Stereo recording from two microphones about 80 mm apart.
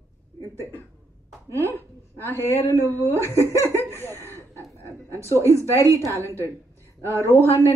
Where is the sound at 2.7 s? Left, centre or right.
Right.